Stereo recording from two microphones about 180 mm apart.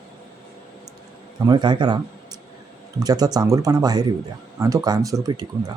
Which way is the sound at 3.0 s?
20° right (ahead or behind).